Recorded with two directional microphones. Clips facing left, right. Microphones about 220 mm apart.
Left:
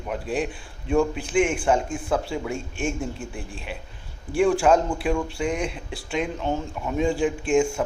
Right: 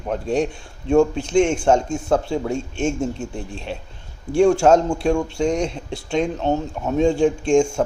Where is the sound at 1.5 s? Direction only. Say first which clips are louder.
Right 5 dB; 40° right (ahead or behind).